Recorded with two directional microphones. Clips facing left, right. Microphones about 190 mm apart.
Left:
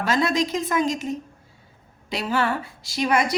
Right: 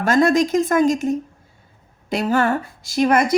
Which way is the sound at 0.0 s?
50° right (ahead or behind).